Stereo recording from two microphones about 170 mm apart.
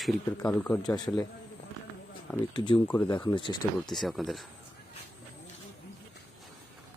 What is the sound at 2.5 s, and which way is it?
Speech, 25° left (ahead or behind).